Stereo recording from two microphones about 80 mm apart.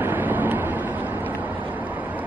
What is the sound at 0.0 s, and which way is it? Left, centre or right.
Vehicle, right.